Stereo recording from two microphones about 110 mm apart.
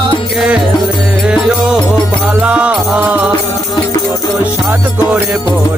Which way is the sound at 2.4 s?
10° right (ahead or behind).